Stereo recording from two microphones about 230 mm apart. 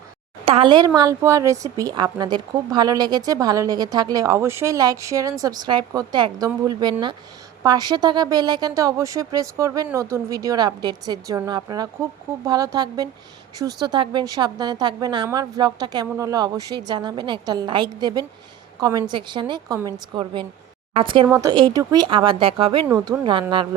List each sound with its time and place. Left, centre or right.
0.4 s a woman's voice: right
22.9 s speech: centre
23.2 s a woman's voice: right